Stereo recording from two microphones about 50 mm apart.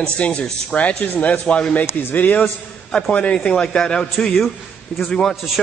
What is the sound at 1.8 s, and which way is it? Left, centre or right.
Speech, left.